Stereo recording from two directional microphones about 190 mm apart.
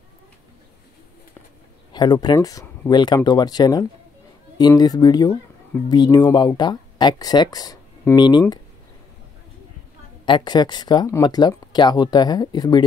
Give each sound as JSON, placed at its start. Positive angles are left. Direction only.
{"t": 1.9, "sound": "speech", "side_deg": 20}
{"t": 10.2, "sound": "speech", "side_deg": 25}